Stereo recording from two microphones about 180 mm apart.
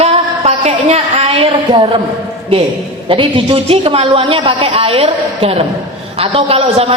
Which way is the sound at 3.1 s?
30° right (ahead or behind).